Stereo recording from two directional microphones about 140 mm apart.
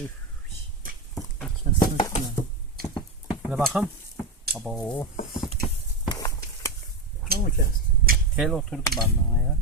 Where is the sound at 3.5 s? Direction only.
5° right (ahead or behind).